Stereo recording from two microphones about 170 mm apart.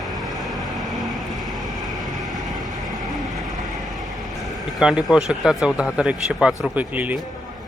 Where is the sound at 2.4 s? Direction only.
20° right (ahead or behind).